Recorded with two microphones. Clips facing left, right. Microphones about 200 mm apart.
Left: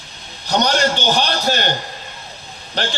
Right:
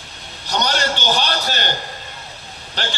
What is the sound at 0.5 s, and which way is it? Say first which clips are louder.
A man's voice: left 4 dB; 45° left (ahead or behind).